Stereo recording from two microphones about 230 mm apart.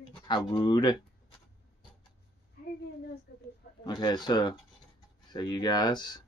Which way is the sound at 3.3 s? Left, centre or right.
Left.